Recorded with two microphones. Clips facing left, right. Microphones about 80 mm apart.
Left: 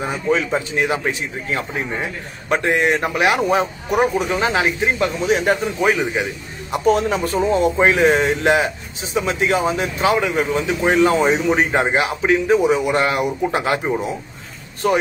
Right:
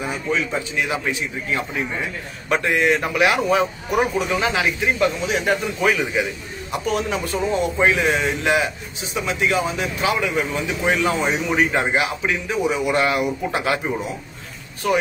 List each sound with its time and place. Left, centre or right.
0.3 s a man's voice: left
8.2 s a man's voice: left
14.8 s a man's voice: left